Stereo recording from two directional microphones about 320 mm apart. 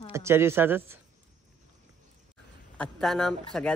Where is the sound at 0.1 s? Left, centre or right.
Centre.